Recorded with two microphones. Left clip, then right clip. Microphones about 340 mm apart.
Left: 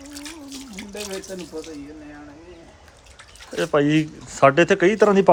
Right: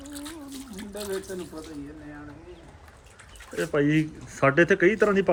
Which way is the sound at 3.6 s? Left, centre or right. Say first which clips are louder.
Left 5 dB; centre.